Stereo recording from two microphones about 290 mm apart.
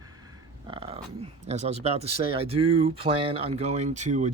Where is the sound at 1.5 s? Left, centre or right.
Right.